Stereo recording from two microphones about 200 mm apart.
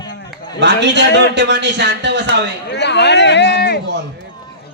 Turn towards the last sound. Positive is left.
turn(degrees=-60)  # may be behind; listen again after turning